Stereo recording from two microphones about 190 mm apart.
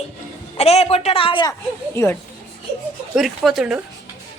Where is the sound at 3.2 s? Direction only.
Centre (ahead or behind).